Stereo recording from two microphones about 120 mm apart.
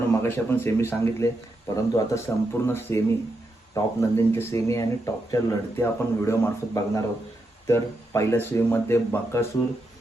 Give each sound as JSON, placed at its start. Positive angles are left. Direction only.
{"t": 0.1, "sound": "speech", "side_deg": 20}